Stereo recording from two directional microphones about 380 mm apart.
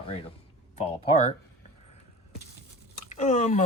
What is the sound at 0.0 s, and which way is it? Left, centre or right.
Speech, centre.